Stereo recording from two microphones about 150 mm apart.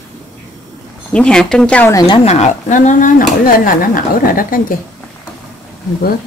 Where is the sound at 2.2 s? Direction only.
45° left (ahead or behind); by 4.6 s 70° left (ahead or behind).